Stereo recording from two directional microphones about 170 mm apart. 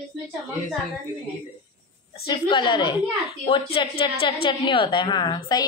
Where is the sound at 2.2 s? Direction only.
30° left (ahead or behind).